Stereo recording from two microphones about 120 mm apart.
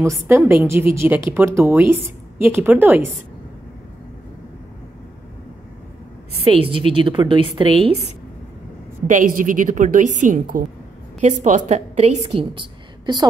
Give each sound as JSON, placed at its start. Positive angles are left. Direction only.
{"t": 0.0, "sound": "a woman's voice", "side_deg": -25}
{"t": 6.4, "sound": "a woman's voice", "side_deg": -50}
{"t": 9.0, "sound": "a woman's voice", "side_deg": -90}
{"t": 12.5, "sound": "a sound", "side_deg": -40}